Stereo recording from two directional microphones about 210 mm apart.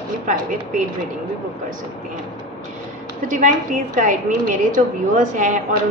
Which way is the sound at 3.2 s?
40° right (ahead or behind).